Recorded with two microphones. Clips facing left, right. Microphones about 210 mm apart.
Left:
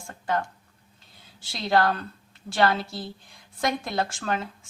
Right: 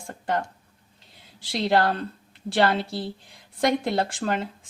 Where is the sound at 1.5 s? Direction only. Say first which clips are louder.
Right 1 dB; 30° right (ahead or behind).